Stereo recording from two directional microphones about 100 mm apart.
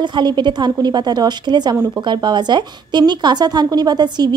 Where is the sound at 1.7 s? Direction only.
20° right (ahead or behind).